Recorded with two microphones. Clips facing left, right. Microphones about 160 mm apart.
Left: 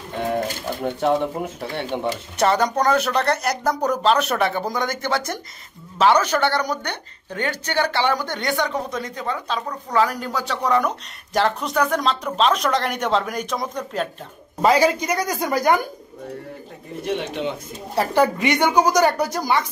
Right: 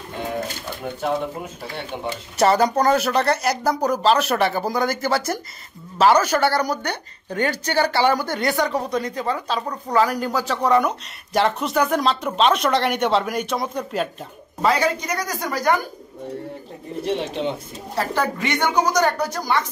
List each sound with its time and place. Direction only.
0.8 s speech: 20° left (ahead or behind)
2.3 s speech: 5° right (ahead or behind)
14.6 s a woman's voice: 15° left (ahead or behind)
17.0 s speech: 30° right (ahead or behind)
17.9 s a woman's voice: 15° left (ahead or behind)